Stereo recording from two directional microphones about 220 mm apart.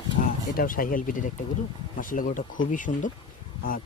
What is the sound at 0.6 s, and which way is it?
A man's voice, 40° left (ahead or behind).